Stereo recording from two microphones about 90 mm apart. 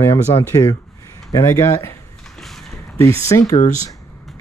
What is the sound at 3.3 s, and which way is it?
Speech, 35° left (ahead or behind).